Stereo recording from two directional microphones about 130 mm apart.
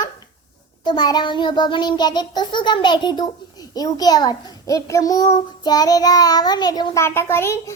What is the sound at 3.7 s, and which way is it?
A child's voice, 30° left (ahead or behind).